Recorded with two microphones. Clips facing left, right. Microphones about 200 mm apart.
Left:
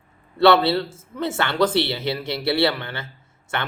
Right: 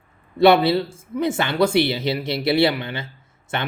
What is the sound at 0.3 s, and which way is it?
Speech, 15° right (ahead or behind).